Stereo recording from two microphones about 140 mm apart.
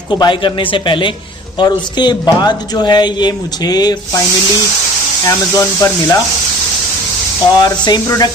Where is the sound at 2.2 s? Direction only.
30° left (ahead or behind).